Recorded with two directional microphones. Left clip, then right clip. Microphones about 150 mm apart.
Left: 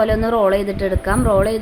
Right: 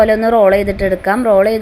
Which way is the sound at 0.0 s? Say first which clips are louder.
Right 6 dB; 20° right (ahead or behind).